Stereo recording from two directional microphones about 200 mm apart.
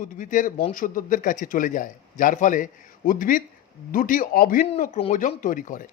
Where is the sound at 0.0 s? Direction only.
40° left (ahead or behind).